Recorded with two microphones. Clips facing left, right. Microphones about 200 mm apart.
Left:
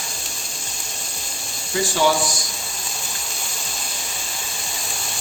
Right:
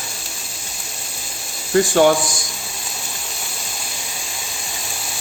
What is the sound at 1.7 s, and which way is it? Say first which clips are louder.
Speech: right 6 dB; 55° right (ahead or behind).